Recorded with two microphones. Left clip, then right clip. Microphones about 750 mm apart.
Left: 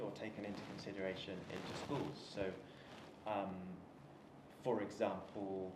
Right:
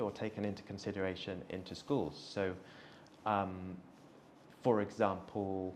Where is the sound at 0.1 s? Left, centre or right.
Right.